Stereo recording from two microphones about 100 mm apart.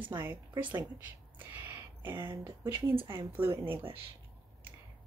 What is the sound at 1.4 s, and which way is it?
Speech, 20° right (ahead or behind).